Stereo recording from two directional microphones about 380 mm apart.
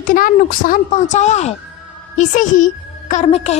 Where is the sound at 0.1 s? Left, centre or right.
Left.